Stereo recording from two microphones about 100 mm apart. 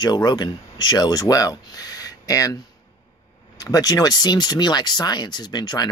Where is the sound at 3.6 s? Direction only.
35° left (ahead or behind).